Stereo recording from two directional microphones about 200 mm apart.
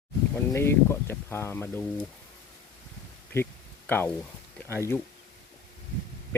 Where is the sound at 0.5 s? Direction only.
10° left (ahead or behind).